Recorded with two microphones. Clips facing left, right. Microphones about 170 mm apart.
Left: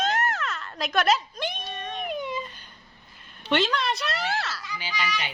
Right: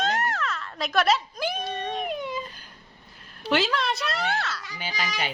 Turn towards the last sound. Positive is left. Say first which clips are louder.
# even
turn(degrees=-40)  # may be behind; listen again after turning